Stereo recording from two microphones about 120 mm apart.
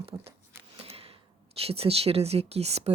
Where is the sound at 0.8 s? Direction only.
55° right (ahead or behind).